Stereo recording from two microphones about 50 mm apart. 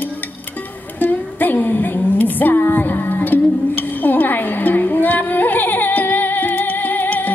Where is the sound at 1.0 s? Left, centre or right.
Left.